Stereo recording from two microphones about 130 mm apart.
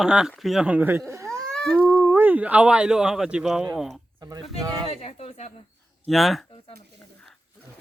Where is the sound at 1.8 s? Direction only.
10° right (ahead or behind).